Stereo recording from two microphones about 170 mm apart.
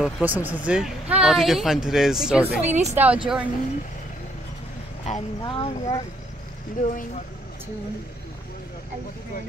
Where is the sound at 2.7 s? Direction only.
40° right (ahead or behind).